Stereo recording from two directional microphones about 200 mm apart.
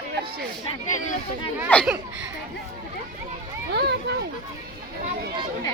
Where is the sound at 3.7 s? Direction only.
55° right (ahead or behind).